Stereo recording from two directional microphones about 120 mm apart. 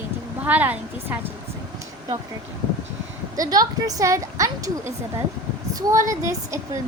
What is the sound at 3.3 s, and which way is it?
A woman's voice, 30° right (ahead or behind).